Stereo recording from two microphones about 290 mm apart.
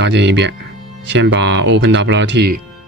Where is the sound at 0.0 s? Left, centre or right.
Right.